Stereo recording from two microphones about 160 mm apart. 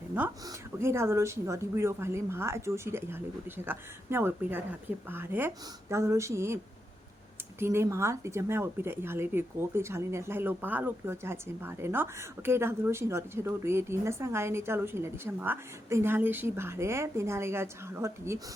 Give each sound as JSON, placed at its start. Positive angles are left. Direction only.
{"t": 0.4, "sound": "speech", "side_deg": -15}
{"t": 7.6, "sound": "speech", "side_deg": -15}